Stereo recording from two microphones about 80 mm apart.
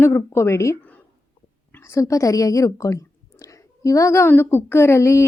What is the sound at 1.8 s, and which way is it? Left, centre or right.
A woman's voice, left.